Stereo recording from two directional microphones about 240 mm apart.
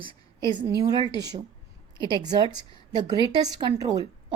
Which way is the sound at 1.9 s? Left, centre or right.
Centre.